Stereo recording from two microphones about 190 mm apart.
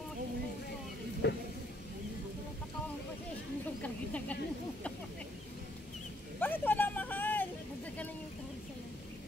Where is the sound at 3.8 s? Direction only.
5° left (ahead or behind).